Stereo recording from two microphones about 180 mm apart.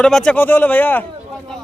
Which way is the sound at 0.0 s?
5° left (ahead or behind).